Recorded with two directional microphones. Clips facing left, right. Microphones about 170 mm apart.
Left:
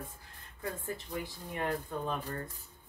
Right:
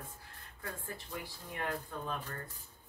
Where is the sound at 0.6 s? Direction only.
20° left (ahead or behind).